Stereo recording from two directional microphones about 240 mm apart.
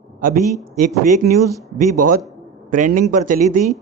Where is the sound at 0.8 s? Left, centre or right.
Right.